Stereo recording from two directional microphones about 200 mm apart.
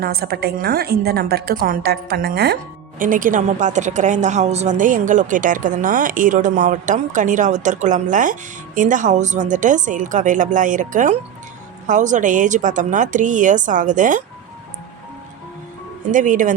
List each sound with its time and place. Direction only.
0.0 s a woman's voice: 50° right (ahead or behind)
3.0 s a woman's voice: 40° right (ahead or behind)
16.0 s a woman's voice: 40° right (ahead or behind)